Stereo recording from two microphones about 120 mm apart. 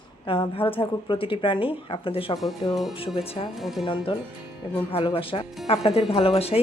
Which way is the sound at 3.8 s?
40° left (ahead or behind).